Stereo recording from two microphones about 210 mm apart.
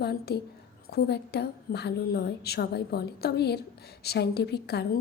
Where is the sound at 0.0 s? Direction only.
50° left (ahead or behind).